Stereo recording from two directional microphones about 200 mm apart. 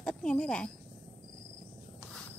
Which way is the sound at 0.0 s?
5° left (ahead or behind).